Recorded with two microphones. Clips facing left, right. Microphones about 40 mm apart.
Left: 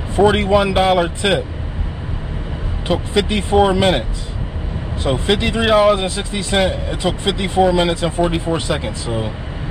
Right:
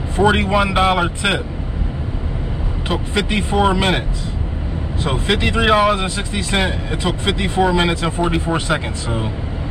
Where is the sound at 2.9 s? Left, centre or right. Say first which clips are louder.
Left 3 dB; centre.